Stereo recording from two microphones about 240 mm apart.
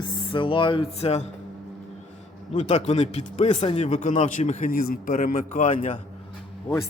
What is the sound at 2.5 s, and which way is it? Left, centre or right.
Speech, left.